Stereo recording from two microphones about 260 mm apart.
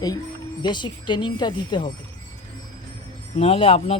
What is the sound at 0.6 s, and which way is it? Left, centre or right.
Speech, centre.